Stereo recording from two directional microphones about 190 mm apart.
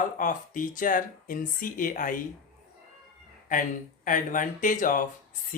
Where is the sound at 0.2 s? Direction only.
45° left (ahead or behind).